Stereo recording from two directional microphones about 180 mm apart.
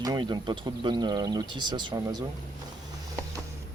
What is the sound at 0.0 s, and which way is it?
Speech, 25° right (ahead or behind).